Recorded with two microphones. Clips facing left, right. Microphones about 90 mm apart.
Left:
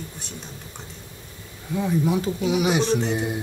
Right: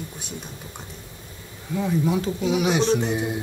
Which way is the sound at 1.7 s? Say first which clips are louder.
Even; 5° left (ahead or behind).